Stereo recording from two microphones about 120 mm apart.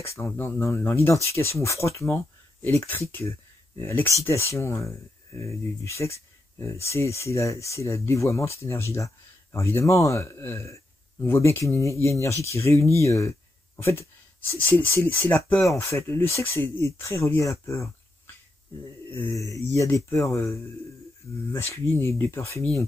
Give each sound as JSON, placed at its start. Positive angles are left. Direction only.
{"t": 0.1, "sound": "speech", "side_deg": 20}
{"t": 3.8, "sound": "speech", "side_deg": 15}
{"t": 14.6, "sound": "speech", "side_deg": 15}
{"t": 19.0, "sound": "mantra", "side_deg": 15}
{"t": 19.3, "sound": "speech", "side_deg": 30}
{"t": 21.5, "sound": "speech", "side_deg": 20}